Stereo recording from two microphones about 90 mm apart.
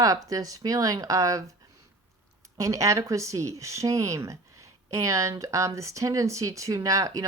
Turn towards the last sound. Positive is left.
turn(degrees=-40)  # may be behind; listen again after turning